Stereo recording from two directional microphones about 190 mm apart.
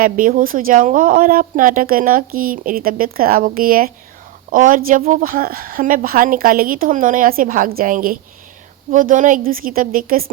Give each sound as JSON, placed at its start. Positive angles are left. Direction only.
{"t": 0.0, "sound": "speech", "side_deg": -45}